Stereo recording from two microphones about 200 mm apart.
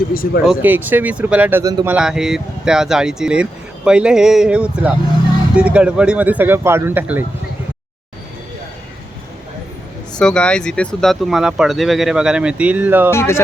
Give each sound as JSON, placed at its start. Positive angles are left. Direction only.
{"t": 0.1, "sound": "speech", "side_deg": 45}
{"t": 0.4, "sound": "speech", "side_deg": -10}
{"t": 10.2, "sound": "speech", "side_deg": 5}
{"t": 13.1, "sound": "speech", "side_deg": 15}